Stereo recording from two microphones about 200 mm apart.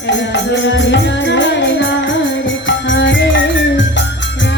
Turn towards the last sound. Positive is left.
turn(degrees=65)  # may be behind; listen again after turning